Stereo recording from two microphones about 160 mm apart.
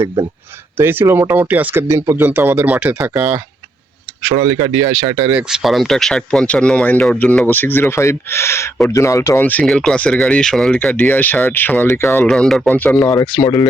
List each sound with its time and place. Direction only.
0.8 s speech: 15° right (ahead or behind)
4.7 s speech: 20° right (ahead or behind); by 13.7 s 25° left (ahead or behind)